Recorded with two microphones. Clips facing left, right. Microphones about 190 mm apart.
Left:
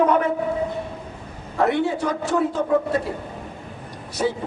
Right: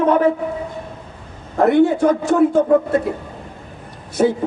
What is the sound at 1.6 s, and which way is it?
A man's voice, 50° right (ahead or behind).